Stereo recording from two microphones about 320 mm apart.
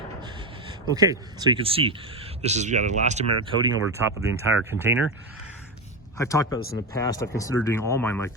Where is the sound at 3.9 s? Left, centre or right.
Centre.